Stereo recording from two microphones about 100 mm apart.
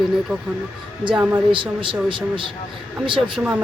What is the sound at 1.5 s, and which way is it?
Speech, 55° right (ahead or behind).